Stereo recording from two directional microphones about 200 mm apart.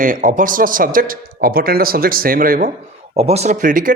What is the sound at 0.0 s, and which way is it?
A man's voice, 40° right (ahead or behind).